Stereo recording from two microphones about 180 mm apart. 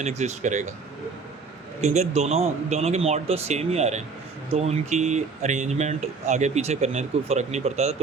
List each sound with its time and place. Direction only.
0.0 s speech: 40° right (ahead or behind)
1.8 s speech: 40° right (ahead or behind)